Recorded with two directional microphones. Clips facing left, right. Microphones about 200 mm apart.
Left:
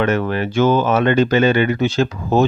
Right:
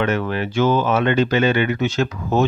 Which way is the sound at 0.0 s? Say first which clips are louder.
Left 3 dB; 45° left (ahead or behind).